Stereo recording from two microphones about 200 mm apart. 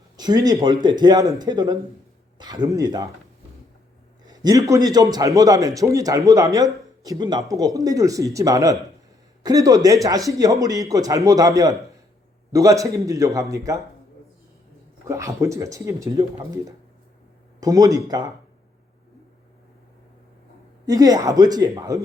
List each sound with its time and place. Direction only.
0.2 s speech: 20° right (ahead or behind)
4.2 s a man's voice: 20° right (ahead or behind)
15.0 s a man's voice: 15° right (ahead or behind)
20.8 s a man's voice: 20° right (ahead or behind)